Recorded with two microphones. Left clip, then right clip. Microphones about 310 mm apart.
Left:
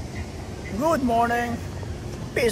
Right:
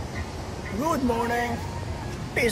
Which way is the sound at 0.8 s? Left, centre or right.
Centre.